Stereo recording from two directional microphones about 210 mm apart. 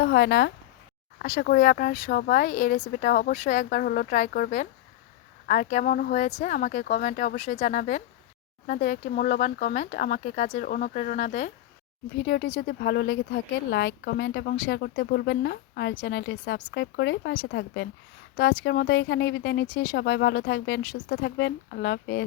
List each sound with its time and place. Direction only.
0.0 s speech: 55° left (ahead or behind); by 11.5 s 35° left (ahead or behind)
12.1 s speech: 55° left (ahead or behind)